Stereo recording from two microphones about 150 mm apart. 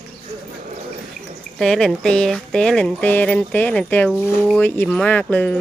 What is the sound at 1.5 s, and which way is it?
Speech, 5° left (ahead or behind).